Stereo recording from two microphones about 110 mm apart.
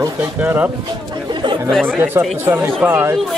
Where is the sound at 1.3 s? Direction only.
45° right (ahead or behind).